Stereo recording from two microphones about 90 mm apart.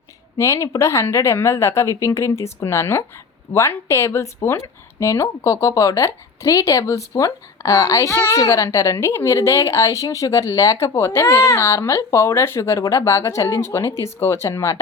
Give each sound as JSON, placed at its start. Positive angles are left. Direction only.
{"t": 0.3, "sound": "a woman's voice", "side_deg": 35}